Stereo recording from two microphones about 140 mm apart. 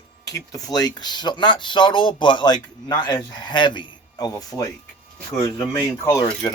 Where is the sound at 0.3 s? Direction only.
25° left (ahead or behind).